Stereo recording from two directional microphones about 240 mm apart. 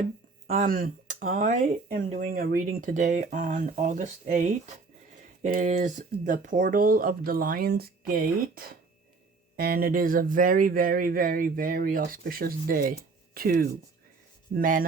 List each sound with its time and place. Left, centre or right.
0.4 s speech: right